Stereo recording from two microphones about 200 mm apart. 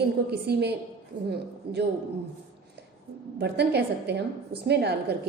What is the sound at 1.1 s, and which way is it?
Speech, 25° right (ahead or behind).